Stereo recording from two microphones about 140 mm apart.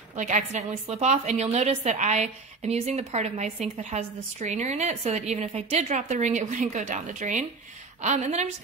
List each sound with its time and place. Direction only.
0.2 s a woman's voice: 65° right (ahead or behind)